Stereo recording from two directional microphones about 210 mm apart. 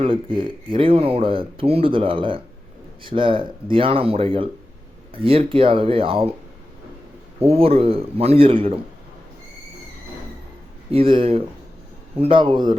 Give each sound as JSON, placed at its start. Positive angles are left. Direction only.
{"t": 0.0, "sound": "speech", "side_deg": -25}
{"t": 7.4, "sound": "speech", "side_deg": -30}
{"t": 10.9, "sound": "speech", "side_deg": -25}